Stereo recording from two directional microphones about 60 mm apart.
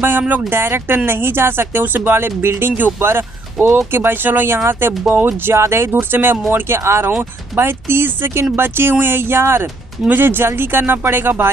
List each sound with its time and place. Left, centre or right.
0.5 s speech: right
5.6 s speech: right